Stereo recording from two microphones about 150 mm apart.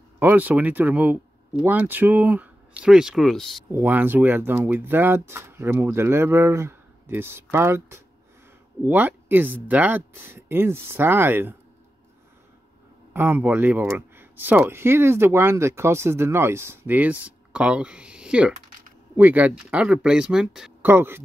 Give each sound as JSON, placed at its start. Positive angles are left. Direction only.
{"t": 0.2, "sound": "speech", "side_deg": -10}
{"t": 3.7, "sound": "speech", "side_deg": -10}
{"t": 13.1, "sound": "speech", "side_deg": -10}